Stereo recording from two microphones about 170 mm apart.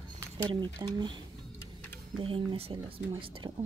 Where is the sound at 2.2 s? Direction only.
30° right (ahead or behind).